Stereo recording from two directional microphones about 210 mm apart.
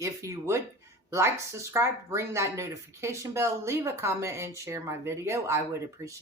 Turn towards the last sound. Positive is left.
turn(degrees=-15)  # may be behind; listen again after turning